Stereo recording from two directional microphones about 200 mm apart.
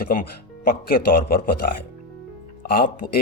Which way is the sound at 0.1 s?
45° left (ahead or behind).